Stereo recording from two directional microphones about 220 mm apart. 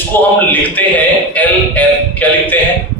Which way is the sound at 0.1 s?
10° left (ahead or behind).